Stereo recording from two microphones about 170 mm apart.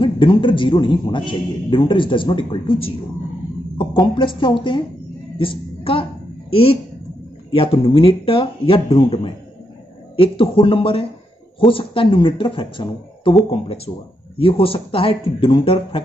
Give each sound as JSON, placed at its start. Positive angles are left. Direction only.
{"t": 0.0, "sound": "a man's voice", "side_deg": 30}